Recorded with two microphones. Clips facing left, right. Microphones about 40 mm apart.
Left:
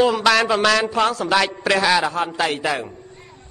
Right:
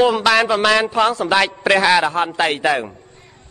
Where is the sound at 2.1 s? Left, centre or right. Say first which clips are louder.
Right 3 dB; right.